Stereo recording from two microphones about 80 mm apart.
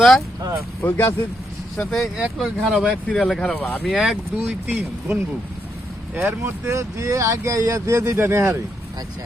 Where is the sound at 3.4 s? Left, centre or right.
Centre.